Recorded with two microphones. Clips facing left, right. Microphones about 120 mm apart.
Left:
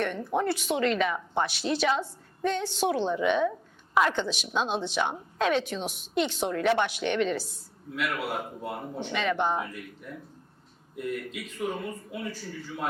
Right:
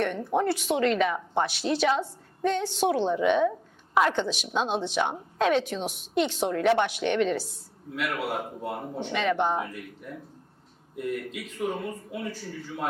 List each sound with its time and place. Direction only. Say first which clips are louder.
0.0 s a woman's voice: right 2 dB; 50° right (ahead or behind)
3.2 s speech: right 3 dB; 45° right (ahead or behind)
4.2 s a woman's voice: right 2 dB; 65° right (ahead or behind); by 8.9 s 45° right (ahead or behind)
8.9 s speech: right 2 dB; 25° right (ahead or behind)
9.1 s speech: right 2 dB; 55° right (ahead or behind)